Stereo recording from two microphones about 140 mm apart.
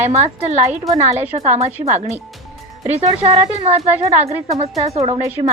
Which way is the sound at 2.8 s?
50° right (ahead or behind).